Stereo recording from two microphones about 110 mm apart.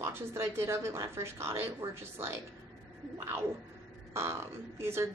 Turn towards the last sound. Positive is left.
turn(degrees=-25)  # may be behind; listen again after turning